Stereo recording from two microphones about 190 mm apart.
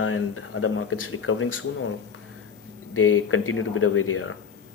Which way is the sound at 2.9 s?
90° left.